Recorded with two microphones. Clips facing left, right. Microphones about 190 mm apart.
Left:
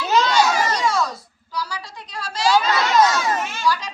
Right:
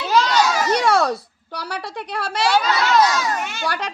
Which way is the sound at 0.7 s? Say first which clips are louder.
Right 4 dB; 65° right (ahead or behind).